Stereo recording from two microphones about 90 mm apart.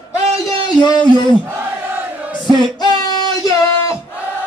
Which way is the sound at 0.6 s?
55° left (ahead or behind).